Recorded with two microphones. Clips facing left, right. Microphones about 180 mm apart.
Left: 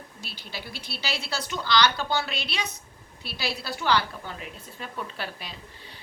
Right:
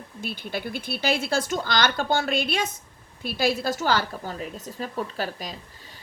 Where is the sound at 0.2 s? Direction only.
55° right (ahead or behind).